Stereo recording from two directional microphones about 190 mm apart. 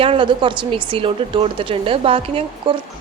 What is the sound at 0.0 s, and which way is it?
Speech, 30° right (ahead or behind).